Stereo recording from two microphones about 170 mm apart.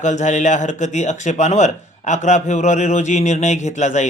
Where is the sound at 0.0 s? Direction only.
45° left (ahead or behind).